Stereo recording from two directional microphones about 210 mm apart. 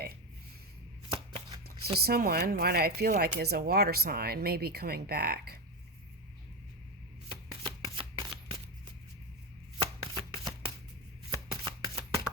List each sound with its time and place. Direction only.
1.1 s chopping: 25° right (ahead or behind)
2.0 s speech: 45° right (ahead or behind)
7.3 s shuffling cards: 25° right (ahead or behind)
9.7 s chopping: 25° right (ahead or behind)
11.3 s shuffling cards: 20° right (ahead or behind)